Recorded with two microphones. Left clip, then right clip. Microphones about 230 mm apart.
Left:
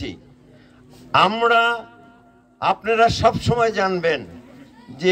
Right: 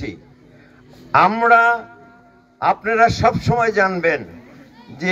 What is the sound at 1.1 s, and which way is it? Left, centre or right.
A man's voice, left.